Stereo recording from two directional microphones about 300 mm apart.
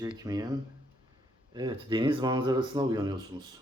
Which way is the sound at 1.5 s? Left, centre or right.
Centre.